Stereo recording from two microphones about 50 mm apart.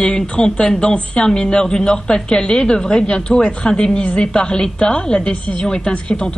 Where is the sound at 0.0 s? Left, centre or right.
Centre.